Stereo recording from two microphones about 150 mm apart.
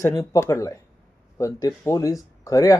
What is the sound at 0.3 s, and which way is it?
Speech, 20° left (ahead or behind).